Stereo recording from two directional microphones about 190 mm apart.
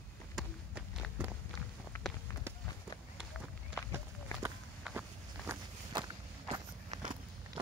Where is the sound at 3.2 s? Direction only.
5° right (ahead or behind).